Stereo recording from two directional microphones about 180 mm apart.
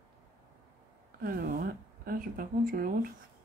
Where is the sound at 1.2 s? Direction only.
55° right (ahead or behind).